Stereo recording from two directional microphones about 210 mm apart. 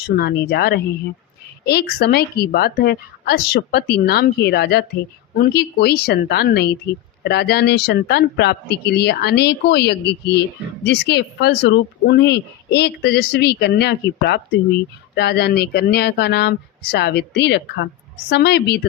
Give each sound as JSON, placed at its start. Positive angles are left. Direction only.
{"t": 0.2, "sound": "speech", "side_deg": 50}